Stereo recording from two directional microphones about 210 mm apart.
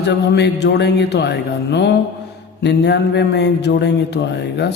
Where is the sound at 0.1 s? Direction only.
55° left (ahead or behind).